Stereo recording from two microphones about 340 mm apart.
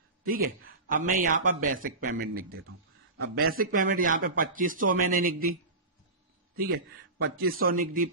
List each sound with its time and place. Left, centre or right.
0.3 s a man's voice: right
3.4 s a man's voice: right
6.6 s a man's voice: right